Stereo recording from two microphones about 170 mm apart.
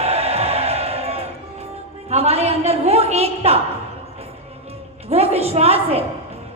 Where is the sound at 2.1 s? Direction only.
40° right (ahead or behind).